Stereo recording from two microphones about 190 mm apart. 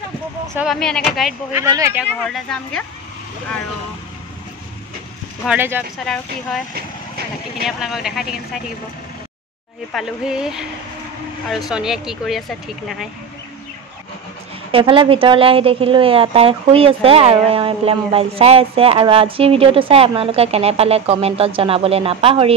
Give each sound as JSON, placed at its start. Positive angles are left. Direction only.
{"t": 0.6, "sound": "speech", "side_deg": 0}
{"t": 1.5, "sound": "speech", "side_deg": -15}
{"t": 2.2, "sound": "speech", "side_deg": 5}
{"t": 5.4, "sound": "speech", "side_deg": -10}
{"t": 6.0, "sound": "speech", "side_deg": 0}
{"t": 7.6, "sound": "speech", "side_deg": 0}
{"t": 9.9, "sound": "speech", "side_deg": -5}
{"t": 14.7, "sound": "a woman's voice", "side_deg": -30}